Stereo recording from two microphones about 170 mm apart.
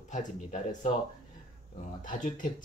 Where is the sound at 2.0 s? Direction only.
50° left (ahead or behind).